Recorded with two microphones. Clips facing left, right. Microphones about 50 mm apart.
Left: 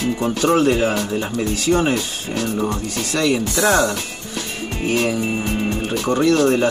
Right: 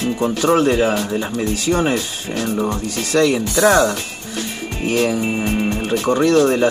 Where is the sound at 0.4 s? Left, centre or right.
Right.